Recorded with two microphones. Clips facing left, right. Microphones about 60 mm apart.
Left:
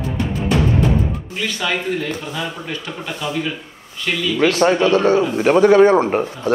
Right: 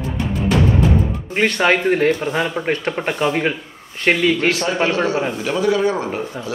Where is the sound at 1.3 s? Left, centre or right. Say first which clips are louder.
Right 8 dB; right.